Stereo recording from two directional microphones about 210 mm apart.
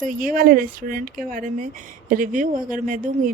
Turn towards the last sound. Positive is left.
turn(degrees=-40)  # may be behind; listen again after turning